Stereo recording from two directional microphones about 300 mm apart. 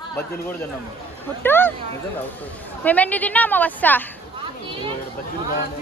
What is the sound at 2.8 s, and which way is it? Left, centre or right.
A woman's voice, centre.